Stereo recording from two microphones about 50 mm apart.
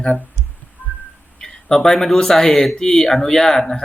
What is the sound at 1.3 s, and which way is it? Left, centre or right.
Speech, centre.